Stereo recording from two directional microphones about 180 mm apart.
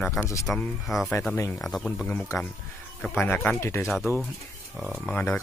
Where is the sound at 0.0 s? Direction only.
15° left (ahead or behind).